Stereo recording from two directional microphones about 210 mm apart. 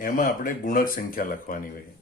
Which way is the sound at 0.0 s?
40° left (ahead or behind).